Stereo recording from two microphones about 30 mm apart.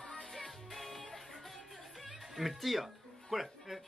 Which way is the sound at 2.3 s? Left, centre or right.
Centre.